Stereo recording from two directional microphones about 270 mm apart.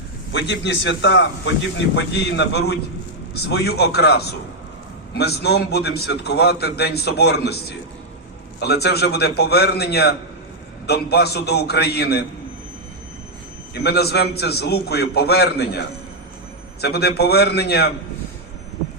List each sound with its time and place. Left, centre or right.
0.3 s a man's voice: left
13.7 s a man's voice: left